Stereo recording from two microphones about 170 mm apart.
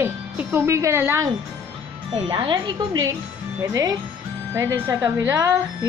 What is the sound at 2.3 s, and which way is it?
A woman's voice, 25° right (ahead or behind).